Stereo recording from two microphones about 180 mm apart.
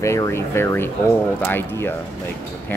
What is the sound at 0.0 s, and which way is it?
Speech, 15° left (ahead or behind).